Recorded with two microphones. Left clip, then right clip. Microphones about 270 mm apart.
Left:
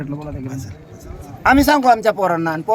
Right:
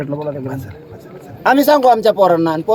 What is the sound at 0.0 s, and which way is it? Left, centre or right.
A man's voice, centre.